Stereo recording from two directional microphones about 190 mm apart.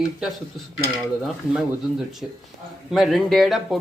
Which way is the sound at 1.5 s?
Centre (ahead or behind).